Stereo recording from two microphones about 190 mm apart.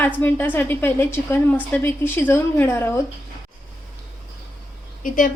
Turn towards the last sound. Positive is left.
turn(degrees=45)  # may be behind; listen again after turning